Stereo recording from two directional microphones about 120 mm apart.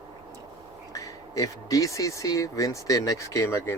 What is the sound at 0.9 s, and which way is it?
Speech, 30° left (ahead or behind).